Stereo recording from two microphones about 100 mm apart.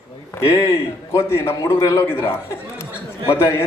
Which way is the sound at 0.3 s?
30° left (ahead or behind).